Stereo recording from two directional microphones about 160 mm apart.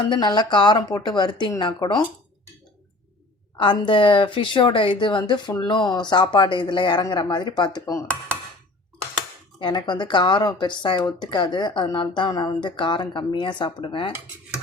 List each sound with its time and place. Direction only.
0.1 s speech: 25° left (ahead or behind)
3.6 s speech: 30° left (ahead or behind)
9.6 s speech: 30° left (ahead or behind)